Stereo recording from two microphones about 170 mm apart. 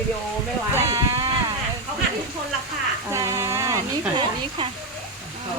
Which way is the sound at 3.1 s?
20° right (ahead or behind).